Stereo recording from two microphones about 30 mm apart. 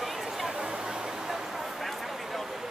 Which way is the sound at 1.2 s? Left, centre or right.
Centre.